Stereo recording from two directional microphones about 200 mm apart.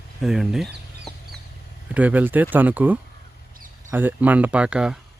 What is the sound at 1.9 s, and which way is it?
Speech, 5° right (ahead or behind).